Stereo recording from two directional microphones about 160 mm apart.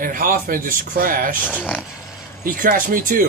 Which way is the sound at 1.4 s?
10° left (ahead or behind).